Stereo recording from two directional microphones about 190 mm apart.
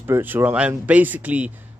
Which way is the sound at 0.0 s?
10° right (ahead or behind).